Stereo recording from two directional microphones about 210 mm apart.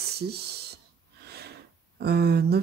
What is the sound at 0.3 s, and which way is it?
Speech, 50° right (ahead or behind).